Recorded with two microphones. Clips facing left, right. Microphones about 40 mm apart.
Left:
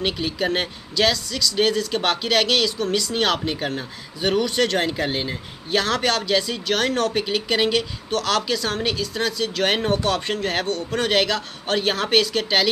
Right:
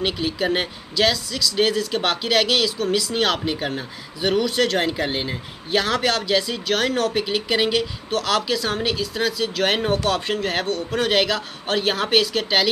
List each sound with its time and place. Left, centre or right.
0.0 s speech: centre